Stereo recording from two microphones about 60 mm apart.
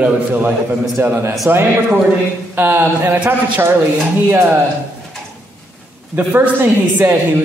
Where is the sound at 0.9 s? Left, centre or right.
Right.